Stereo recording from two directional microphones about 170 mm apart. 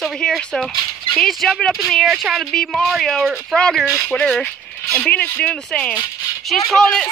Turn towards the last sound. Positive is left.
turn(degrees=5)  # may be behind; listen again after turning